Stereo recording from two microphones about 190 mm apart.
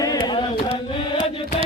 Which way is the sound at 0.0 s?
20° left (ahead or behind).